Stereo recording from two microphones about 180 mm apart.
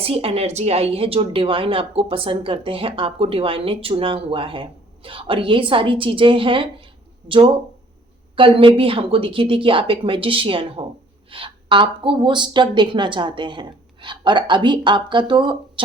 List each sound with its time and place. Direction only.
0.0 s a woman's voice: 30° right (ahead or behind)